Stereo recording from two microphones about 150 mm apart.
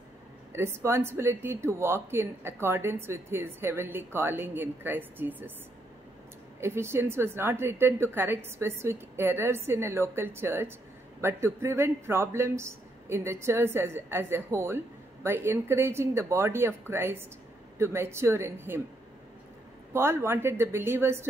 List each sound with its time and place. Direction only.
0.5 s speech: 15° right (ahead or behind)
6.6 s speech: 15° right (ahead or behind)
19.9 s speech: 15° right (ahead or behind)